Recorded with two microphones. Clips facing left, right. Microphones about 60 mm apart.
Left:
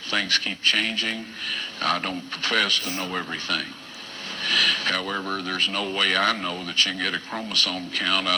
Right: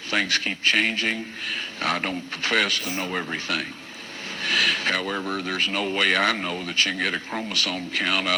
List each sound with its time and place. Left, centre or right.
0.1 s speech: centre
4.4 s a sound: centre
5.1 s speech: centre
5.4 s speech: right
6.4 s speech: right